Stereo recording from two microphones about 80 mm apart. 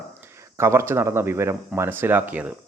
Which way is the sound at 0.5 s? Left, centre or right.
Right.